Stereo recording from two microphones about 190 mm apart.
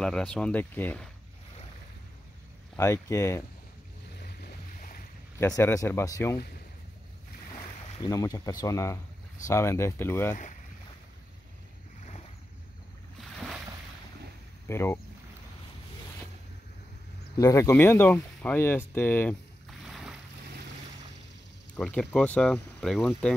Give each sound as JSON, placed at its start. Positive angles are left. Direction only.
{"t": 0.0, "sound": "speech", "side_deg": 5}
{"t": 2.7, "sound": "speech", "side_deg": 15}
{"t": 4.2, "sound": "boat", "side_deg": 55}
{"t": 5.4, "sound": "speech", "side_deg": 15}
{"t": 8.0, "sound": "speech", "side_deg": 20}
{"t": 12.0, "sound": "boat", "side_deg": 35}
{"t": 13.2, "sound": "a sound", "side_deg": -5}
{"t": 14.7, "sound": "speech", "side_deg": 15}
{"t": 17.4, "sound": "speech", "side_deg": 15}
{"t": 19.9, "sound": "boat", "side_deg": 0}
{"t": 21.7, "sound": "speech", "side_deg": 5}